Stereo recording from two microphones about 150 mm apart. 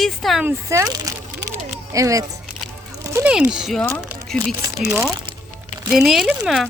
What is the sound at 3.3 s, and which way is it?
Speech, 5° right (ahead or behind).